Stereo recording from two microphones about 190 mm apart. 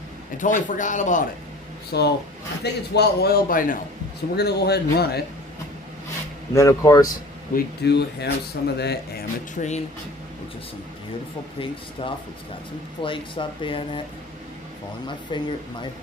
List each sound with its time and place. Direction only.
0.3 s speech: 40° left (ahead or behind)
1.9 s a man's voice: 60° left (ahead or behind)
4.4 s speech: 60° left (ahead or behind)
6.5 s speech: 15° left (ahead or behind)
7.5 s speech: 60° left (ahead or behind)
9.6 s speech: 40° left (ahead or behind)
11.6 s speech: 25° left (ahead or behind)
15.0 s speech: 25° left (ahead or behind)